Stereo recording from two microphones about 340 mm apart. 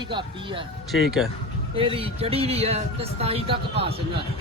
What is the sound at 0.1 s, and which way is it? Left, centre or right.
Speech, centre.